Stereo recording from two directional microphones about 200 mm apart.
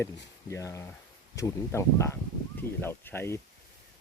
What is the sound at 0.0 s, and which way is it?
Speech, 15° left (ahead or behind).